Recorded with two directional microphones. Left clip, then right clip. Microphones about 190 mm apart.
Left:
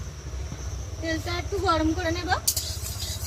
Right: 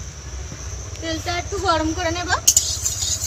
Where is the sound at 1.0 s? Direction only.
10° right (ahead or behind).